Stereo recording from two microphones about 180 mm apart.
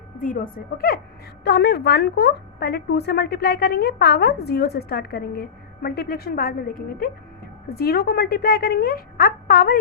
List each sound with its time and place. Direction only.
0.2 s speech: 50° left (ahead or behind)
1.5 s a woman's voice: 65° left (ahead or behind)